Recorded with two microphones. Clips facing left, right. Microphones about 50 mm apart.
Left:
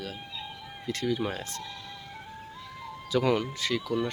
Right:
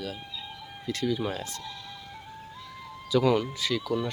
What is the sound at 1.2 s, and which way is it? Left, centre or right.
Speech, left.